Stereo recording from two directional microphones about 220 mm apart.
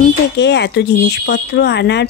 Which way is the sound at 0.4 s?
50° left (ahead or behind).